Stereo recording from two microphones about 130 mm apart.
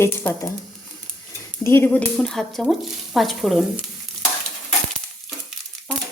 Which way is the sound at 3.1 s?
Centre (ahead or behind).